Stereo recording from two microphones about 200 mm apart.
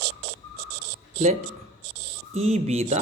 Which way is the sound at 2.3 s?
30° right (ahead or behind).